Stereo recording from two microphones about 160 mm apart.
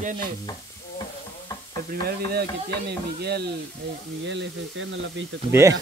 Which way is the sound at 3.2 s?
90° right.